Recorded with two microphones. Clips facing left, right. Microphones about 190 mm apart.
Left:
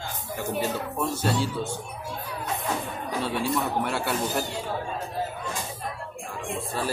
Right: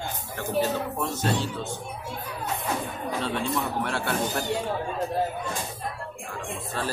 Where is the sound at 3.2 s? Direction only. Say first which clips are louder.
Left 2 dB; 5° left (ahead or behind).